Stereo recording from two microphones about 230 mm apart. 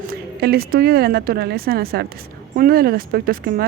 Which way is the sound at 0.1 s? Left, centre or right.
Right.